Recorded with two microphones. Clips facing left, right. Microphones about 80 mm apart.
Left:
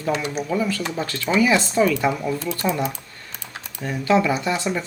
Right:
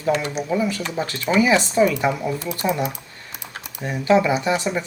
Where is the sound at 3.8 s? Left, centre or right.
Centre.